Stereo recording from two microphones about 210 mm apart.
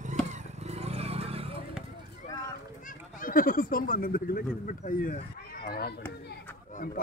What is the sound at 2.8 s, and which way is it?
Speech, 40° left (ahead or behind).